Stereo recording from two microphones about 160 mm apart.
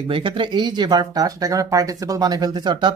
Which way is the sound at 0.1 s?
30° right (ahead or behind).